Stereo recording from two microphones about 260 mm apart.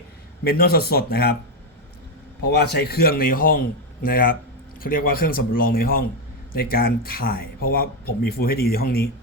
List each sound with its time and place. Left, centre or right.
0.4 s speech: left
2.5 s speech: left